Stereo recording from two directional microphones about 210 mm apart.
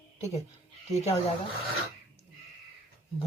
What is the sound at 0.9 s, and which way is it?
Speech, 30° left (ahead or behind).